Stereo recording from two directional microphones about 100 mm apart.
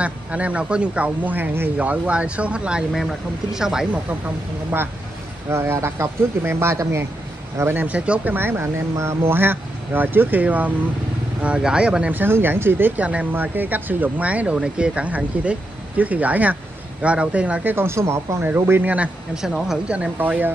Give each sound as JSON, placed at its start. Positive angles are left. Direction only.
{"t": 0.0, "sound": "speech", "side_deg": -15}
{"t": 2.9, "sound": "speech", "side_deg": 0}
{"t": 5.5, "sound": "speech", "side_deg": -25}
{"t": 17.7, "sound": "speech", "side_deg": -25}
{"t": 19.3, "sound": "speech", "side_deg": -5}